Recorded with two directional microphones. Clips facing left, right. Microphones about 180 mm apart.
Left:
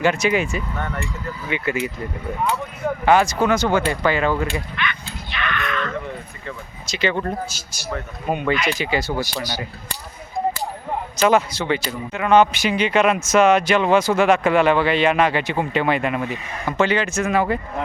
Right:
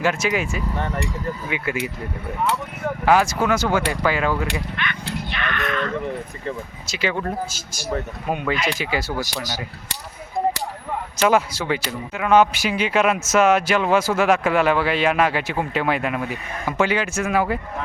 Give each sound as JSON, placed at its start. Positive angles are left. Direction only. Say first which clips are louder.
{"t": 0.0, "sound": "a man's voice", "louder": "left 3 dB", "side_deg": -5}
{"t": 3.1, "sound": "a man's voice", "louder": "left 1 dB", "side_deg": -5}
{"t": 5.1, "sound": "a sound", "louder": "right 1 dB", "side_deg": -50}
{"t": 6.8, "sound": "a man's voice", "louder": "left 2 dB", "side_deg": -5}
{"t": 11.3, "sound": "a man's voice", "louder": "left 1 dB", "side_deg": -10}